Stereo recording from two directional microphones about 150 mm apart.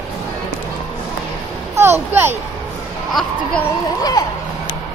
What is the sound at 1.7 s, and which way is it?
Speech, 15° right (ahead or behind).